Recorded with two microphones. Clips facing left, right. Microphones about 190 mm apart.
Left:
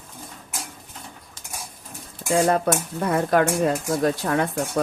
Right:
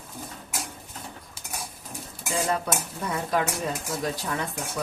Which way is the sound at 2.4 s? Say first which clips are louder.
Left 7 dB; 55° left (ahead or behind).